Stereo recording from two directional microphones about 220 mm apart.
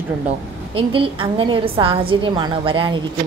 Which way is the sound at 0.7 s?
25° right (ahead or behind).